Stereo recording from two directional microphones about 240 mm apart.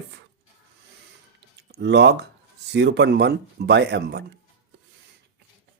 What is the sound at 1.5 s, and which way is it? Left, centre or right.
Speech, right.